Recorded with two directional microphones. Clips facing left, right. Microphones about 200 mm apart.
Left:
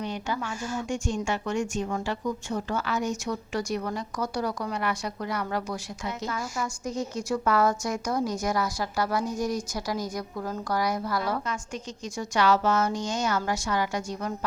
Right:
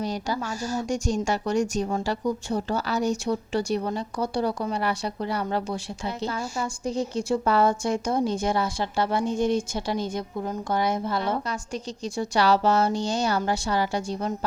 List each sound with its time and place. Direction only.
0.0 s speech: 35° right (ahead or behind)